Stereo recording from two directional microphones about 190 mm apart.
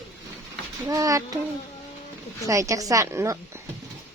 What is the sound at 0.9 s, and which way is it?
Speech, 15° right (ahead or behind).